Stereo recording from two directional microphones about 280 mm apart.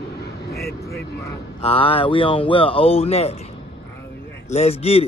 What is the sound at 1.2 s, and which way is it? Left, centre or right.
Speech, centre.